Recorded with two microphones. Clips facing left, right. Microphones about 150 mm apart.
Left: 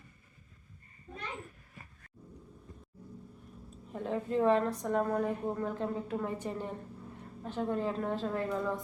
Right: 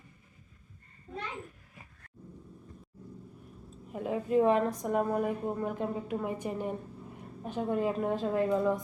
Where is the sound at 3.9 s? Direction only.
10° right (ahead or behind).